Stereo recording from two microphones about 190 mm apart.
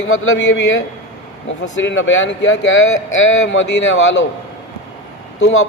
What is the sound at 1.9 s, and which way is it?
Speech, 80° left.